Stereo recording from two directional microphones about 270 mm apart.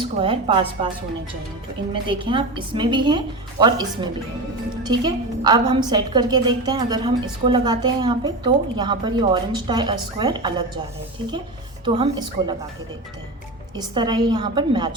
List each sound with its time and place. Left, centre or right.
0.0 s a woman's voice: centre
2.0 s a woman's voice: centre
11.9 s a woman's voice: centre
13.7 s a woman's voice: centre